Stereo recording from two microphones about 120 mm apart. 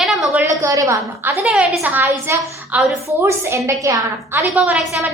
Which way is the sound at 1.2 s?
10° right (ahead or behind).